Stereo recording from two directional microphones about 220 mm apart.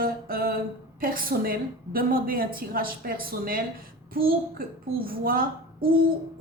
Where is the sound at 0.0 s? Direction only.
45° right (ahead or behind).